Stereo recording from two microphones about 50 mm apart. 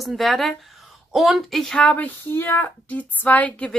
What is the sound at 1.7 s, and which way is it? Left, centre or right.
Speech, left.